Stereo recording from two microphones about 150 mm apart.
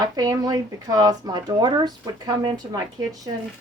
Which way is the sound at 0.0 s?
25° right (ahead or behind).